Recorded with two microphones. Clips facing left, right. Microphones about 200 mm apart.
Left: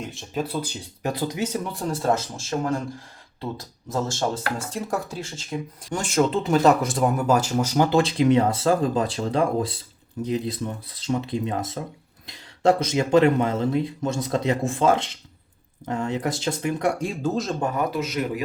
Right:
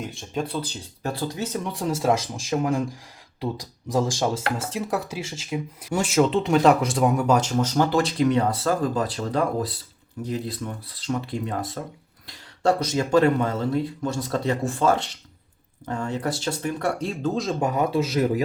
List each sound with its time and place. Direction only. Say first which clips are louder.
0.0 s speech: even; centre (ahead or behind)
1.6 s speech: right 4 dB; centre (ahead or behind)
4.5 s speech: right 1 dB; 5° right (ahead or behind)
7.9 s speech: left 2 dB; 25° left (ahead or behind)
17.6 s a man's voice: right 2 dB; 20° right (ahead or behind)
18.0 s speech: right 4 dB; 35° right (ahead or behind)